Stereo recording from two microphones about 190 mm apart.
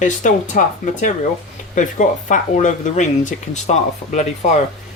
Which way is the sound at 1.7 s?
40° left (ahead or behind).